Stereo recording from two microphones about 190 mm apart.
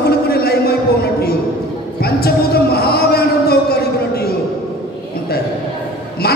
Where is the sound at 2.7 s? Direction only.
55° left (ahead or behind).